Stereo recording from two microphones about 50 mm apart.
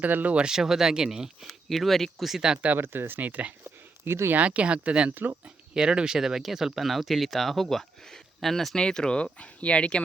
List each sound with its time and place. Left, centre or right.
0.0 s speech: right
0.3 s speech: centre
1.5 s speech: centre
2.4 s speech: centre
2.7 s speech: right
4.0 s speech: right
4.3 s speech: right
5.7 s speech: centre
8.8 s speech: centre